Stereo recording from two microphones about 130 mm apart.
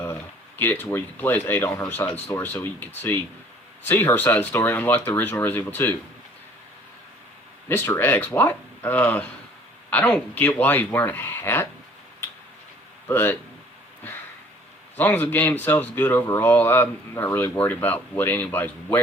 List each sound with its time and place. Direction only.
0.0 s speech: 15° left (ahead or behind)
7.7 s speech: 15° left (ahead or behind)
13.1 s speech: 15° left (ahead or behind)
14.9 s speech: 15° left (ahead or behind)